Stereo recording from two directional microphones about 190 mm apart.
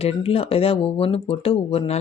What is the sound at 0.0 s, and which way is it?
Speech, 30° left (ahead or behind).